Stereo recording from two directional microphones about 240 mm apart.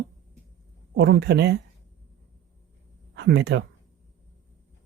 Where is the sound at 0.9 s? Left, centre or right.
Right.